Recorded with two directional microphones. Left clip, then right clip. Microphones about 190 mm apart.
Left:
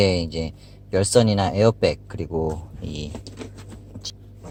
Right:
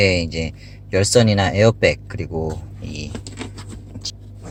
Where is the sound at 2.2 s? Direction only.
20° left (ahead or behind).